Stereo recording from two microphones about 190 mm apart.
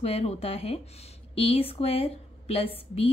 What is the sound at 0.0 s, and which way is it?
A woman's voice, 30° left (ahead or behind).